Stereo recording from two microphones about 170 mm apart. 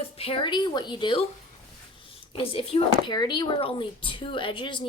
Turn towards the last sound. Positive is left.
turn(degrees=30)  # may be behind; listen again after turning